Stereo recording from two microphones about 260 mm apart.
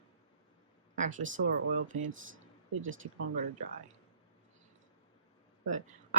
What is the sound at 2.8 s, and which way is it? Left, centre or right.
Speech, right.